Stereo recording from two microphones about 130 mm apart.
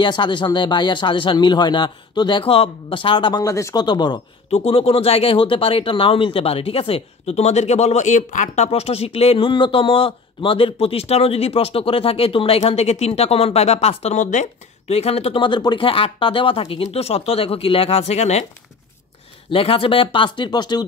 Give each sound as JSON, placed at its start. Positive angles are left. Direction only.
{"t": 0.0, "sound": "speech", "side_deg": 35}
{"t": 4.5, "sound": "a man's voice", "side_deg": 50}
{"t": 8.6, "sound": "a man's voice", "side_deg": 50}
{"t": 19.5, "sound": "speech", "side_deg": 45}